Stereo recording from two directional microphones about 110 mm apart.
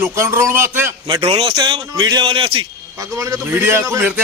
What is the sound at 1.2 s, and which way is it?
A man's voice, 50° right (ahead or behind).